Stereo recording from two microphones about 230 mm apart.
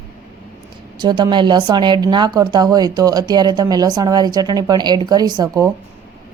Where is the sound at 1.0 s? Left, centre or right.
Centre.